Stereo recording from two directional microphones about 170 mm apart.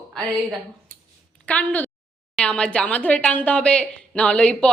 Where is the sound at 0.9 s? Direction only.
55° right (ahead or behind).